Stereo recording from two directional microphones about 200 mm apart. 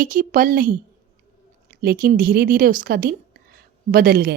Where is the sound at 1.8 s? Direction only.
50° right (ahead or behind).